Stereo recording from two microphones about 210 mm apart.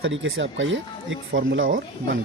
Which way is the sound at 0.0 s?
70° right (ahead or behind).